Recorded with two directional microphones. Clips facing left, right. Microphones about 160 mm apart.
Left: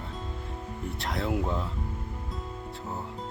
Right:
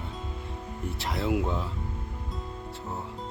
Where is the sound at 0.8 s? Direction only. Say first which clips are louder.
Right 2 dB; centre (ahead or behind).